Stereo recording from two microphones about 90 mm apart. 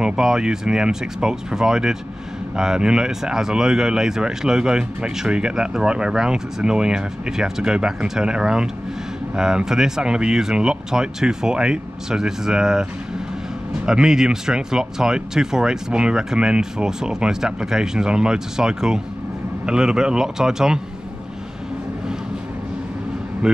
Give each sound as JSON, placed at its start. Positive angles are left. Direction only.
{"t": 0.0, "sound": "speech", "side_deg": -10}
{"t": 13.8, "sound": "speech", "side_deg": -5}
{"t": 23.4, "sound": "speech", "side_deg": -10}